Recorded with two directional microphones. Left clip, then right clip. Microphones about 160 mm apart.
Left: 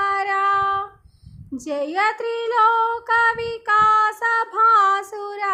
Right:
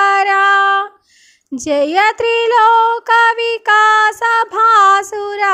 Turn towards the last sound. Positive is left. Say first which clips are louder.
# right 9 dB
turn(degrees=-35)  # may be behind; listen again after turning